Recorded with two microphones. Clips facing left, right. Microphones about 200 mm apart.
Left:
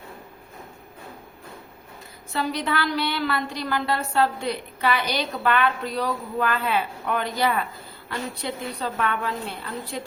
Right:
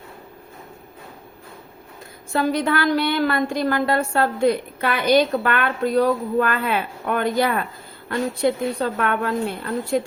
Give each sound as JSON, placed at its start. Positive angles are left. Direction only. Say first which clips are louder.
{"t": 2.3, "sound": "a woman's voice", "louder": "right 6 dB", "side_deg": -50}